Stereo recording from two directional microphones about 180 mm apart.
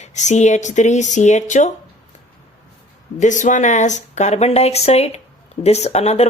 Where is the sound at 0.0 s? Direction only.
40° left (ahead or behind).